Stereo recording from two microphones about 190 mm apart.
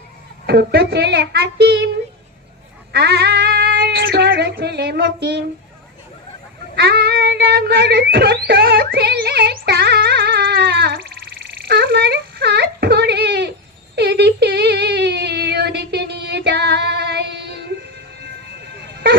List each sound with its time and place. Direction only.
0.4 s speech: 60° right (ahead or behind)
2.9 s speech: 60° right (ahead or behind)
6.7 s a sound: 55° right (ahead or behind)